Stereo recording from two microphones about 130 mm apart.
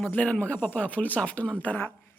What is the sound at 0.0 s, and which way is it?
Speech, 10° left (ahead or behind).